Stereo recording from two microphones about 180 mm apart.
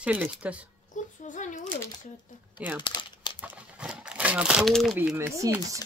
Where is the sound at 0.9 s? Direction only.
45° left (ahead or behind).